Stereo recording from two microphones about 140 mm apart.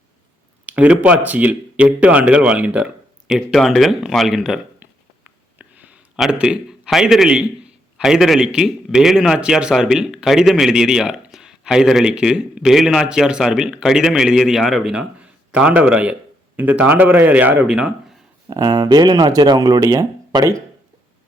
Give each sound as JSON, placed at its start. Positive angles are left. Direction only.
{"t": 0.6, "sound": "a man's voice", "side_deg": -10}
{"t": 18.4, "sound": "speech", "side_deg": -25}